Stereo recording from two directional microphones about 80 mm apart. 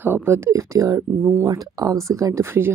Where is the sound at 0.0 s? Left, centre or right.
Right.